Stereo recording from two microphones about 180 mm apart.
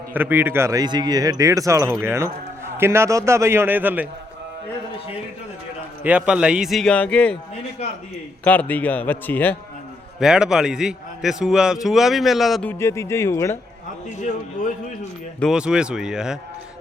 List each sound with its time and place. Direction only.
0.1 s speech: 10° right (ahead or behind)
6.0 s a man's voice: 5° right (ahead or behind)
8.4 s a man's voice: 10° left (ahead or behind)
10.2 s a man's voice: 5° right (ahead or behind)
12.6 s a man's voice: 15° left (ahead or behind)
14.2 s a man's voice: 40° left (ahead or behind)
15.4 s a man's voice: centre (ahead or behind)